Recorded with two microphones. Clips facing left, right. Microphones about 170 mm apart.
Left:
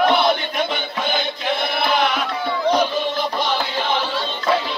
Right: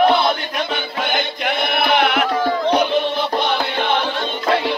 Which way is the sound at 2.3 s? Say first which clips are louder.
Right 5 dB; 45° right (ahead or behind).